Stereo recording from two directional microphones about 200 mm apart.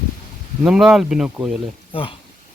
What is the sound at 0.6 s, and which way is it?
Speech, centre (ahead or behind).